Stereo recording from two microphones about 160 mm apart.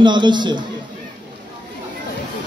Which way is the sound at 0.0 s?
30° right (ahead or behind).